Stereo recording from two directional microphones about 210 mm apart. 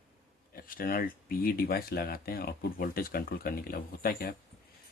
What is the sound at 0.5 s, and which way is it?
Speech, 45° left (ahead or behind).